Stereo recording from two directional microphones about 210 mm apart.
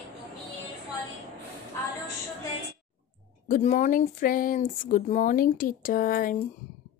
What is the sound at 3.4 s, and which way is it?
Speech, 35° left (ahead or behind).